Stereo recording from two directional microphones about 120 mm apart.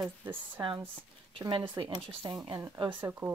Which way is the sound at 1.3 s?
45° right (ahead or behind).